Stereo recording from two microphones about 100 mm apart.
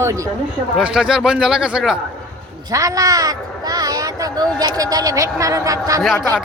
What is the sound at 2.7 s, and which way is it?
A woman's voice, 35° right (ahead or behind).